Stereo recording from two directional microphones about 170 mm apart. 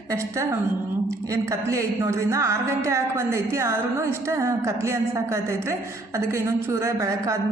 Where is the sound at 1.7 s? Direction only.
15° right (ahead or behind).